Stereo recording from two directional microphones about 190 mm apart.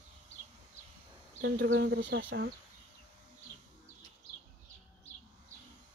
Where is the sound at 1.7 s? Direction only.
75° right (ahead or behind).